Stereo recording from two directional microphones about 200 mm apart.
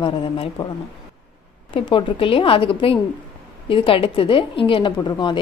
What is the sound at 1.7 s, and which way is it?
A woman's voice, 25° left (ahead or behind).